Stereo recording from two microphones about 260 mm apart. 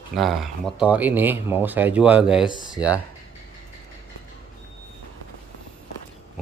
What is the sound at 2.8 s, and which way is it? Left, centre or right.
Speech, centre.